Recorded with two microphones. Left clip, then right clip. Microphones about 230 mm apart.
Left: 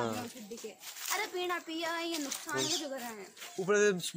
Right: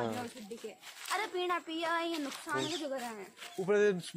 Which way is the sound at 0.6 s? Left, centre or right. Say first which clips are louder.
Left 1 dB; centre.